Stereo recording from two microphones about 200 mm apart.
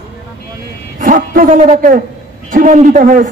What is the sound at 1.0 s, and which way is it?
A man's voice, 40° right (ahead or behind).